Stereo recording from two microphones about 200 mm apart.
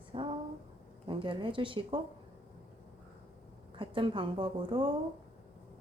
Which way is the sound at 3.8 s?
25° right (ahead or behind).